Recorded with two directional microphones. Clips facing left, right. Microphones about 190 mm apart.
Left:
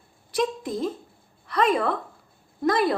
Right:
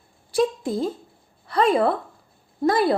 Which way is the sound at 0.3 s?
30° right (ahead or behind).